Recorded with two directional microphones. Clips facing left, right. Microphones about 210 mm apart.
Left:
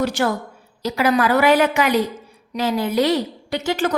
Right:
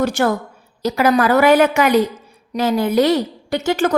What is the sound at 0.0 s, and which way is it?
A woman's voice, 50° right (ahead or behind).